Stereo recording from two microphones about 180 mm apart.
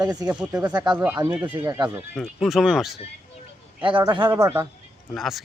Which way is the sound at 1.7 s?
20° right (ahead or behind).